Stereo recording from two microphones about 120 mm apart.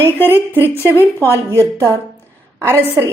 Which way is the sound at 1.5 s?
25° right (ahead or behind).